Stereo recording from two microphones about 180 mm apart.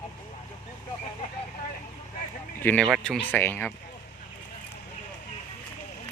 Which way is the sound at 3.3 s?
10° left (ahead or behind).